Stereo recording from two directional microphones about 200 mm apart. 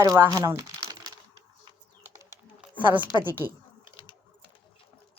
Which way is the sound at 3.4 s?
20° left (ahead or behind).